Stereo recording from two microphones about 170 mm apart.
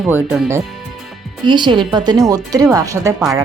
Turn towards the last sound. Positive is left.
turn(degrees=-20)  # may be behind; listen again after turning